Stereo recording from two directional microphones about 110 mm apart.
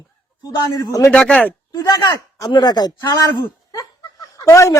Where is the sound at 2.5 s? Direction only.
40° left (ahead or behind).